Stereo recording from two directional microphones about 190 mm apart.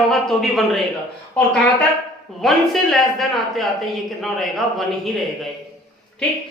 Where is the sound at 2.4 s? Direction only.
Centre (ahead or behind).